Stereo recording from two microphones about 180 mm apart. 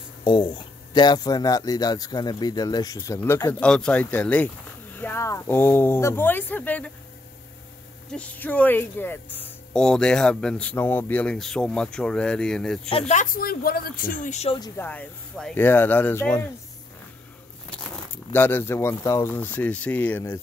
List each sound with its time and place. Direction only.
0.2 s speech: 25° left (ahead or behind); by 6.9 s 10° left (ahead or behind)
8.1 s speech: 10° left (ahead or behind)
13.1 s speech: 45° left (ahead or behind)
14.6 s speech: 10° left (ahead or behind)
17.6 s speech: 10° left (ahead or behind)